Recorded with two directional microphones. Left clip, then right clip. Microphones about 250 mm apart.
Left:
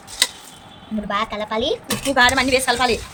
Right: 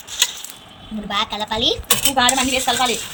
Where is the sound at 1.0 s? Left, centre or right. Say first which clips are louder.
Right 1 dB; centre.